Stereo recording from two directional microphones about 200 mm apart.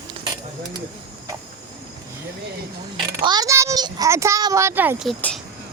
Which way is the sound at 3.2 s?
20° right (ahead or behind).